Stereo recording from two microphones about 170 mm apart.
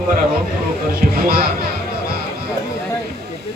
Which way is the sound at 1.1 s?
60° right (ahead or behind).